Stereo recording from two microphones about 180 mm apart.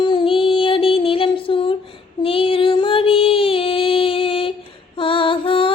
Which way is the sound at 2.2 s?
30° left (ahead or behind).